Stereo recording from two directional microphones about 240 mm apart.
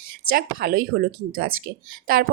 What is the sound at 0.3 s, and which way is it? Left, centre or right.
Speech, right.